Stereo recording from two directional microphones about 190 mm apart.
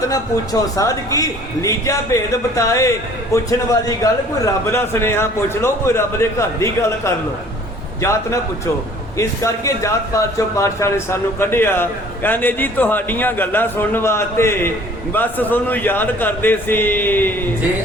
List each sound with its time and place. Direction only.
0.1 s speech: 20° left (ahead or behind)